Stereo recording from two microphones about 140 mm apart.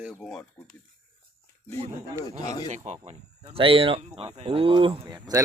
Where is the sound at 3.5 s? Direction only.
40° right (ahead or behind).